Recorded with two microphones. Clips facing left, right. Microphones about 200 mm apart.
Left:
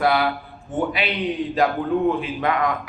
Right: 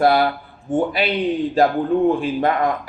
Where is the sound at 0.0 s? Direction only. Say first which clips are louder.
Right 4 dB; 40° right (ahead or behind).